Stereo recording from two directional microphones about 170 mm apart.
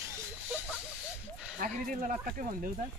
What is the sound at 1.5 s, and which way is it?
Speech, 50° right (ahead or behind).